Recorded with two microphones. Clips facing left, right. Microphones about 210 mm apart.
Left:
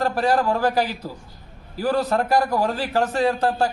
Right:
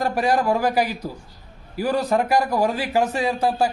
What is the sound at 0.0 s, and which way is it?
A man's voice, 10° right (ahead or behind).